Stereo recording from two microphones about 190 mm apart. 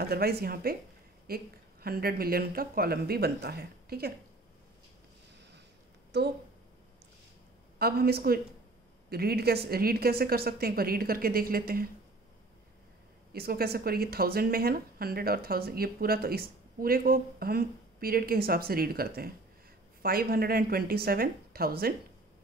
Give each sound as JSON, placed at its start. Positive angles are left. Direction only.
{"t": 0.0, "sound": "speech", "side_deg": -55}
{"t": 6.1, "sound": "speech", "side_deg": -60}
{"t": 7.8, "sound": "speech", "side_deg": -55}
{"t": 13.3, "sound": "speech", "side_deg": -55}